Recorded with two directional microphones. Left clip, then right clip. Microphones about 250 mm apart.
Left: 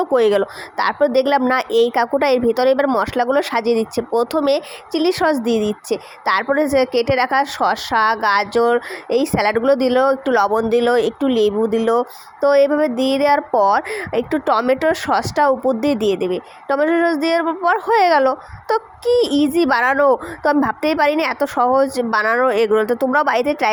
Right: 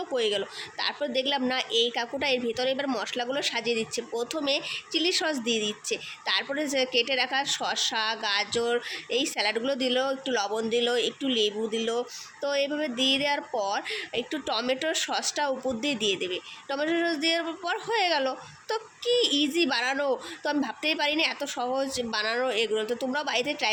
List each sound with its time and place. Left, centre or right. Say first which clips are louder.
0.0 s speech: left 13 dB; left